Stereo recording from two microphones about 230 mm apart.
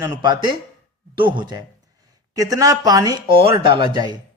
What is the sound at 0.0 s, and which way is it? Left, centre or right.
A man's voice, centre.